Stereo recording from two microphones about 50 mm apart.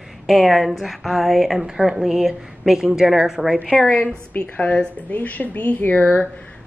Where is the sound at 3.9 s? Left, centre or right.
Centre.